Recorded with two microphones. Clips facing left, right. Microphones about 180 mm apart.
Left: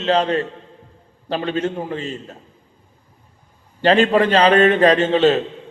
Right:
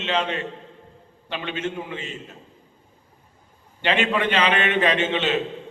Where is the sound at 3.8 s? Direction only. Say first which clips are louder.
Left 8 dB; 35° left (ahead or behind).